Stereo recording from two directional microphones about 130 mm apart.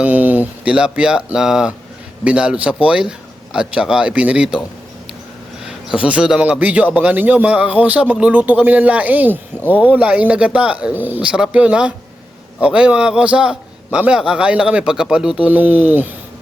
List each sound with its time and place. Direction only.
0.0 s a man's voice: 10° right (ahead or behind)
5.6 s a man's voice: 5° right (ahead or behind)